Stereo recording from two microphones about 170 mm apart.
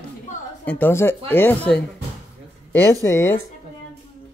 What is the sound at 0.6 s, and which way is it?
Speech, 10° left (ahead or behind).